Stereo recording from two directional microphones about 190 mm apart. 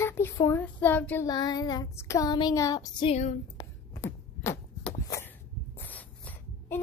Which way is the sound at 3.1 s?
40° left (ahead or behind).